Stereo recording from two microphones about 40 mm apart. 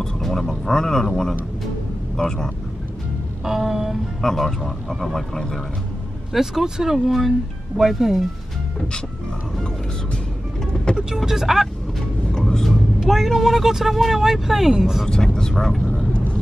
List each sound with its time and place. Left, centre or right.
0.0 s speech: centre
3.4 s speech: centre
4.2 s speech: centre
6.3 s speech: centre
11.1 s speech: centre
12.3 s vehicle: centre
13.0 s speech: centre
15.5 s speech: centre